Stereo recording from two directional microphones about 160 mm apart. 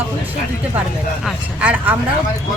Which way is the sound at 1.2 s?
10° right (ahead or behind).